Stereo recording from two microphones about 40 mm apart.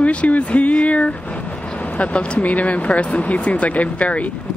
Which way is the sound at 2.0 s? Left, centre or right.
Left.